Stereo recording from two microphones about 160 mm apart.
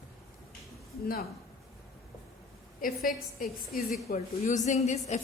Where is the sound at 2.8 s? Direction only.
60° left (ahead or behind).